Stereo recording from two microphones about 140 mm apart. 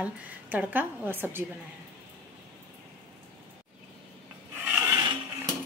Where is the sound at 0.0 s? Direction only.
10° right (ahead or behind).